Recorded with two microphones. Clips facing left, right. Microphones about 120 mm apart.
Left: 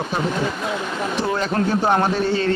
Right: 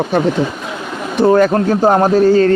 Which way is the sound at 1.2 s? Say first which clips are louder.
Right 13 dB; 50° right (ahead or behind).